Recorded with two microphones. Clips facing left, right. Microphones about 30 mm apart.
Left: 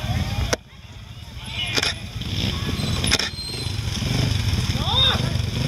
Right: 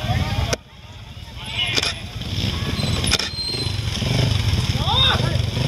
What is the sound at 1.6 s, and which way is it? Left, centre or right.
Vehicle, centre.